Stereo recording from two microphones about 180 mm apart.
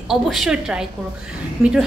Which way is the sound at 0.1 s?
Centre (ahead or behind).